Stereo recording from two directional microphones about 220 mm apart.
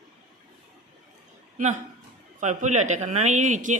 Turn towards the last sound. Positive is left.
turn(degrees=-35)  # may be behind; listen again after turning